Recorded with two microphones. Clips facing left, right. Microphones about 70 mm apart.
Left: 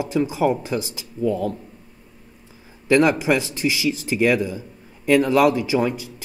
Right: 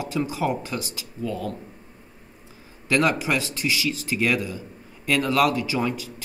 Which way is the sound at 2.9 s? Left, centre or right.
Left.